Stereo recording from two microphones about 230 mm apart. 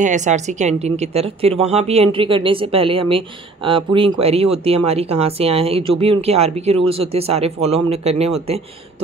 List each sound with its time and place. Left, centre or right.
0.0 s speech: right